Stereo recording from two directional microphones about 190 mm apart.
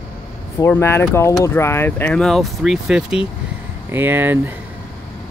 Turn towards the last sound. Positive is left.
turn(degrees=-10)  # may be behind; listen again after turning